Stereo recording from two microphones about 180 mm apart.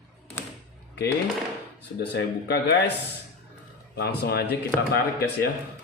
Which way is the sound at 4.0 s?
65° left (ahead or behind).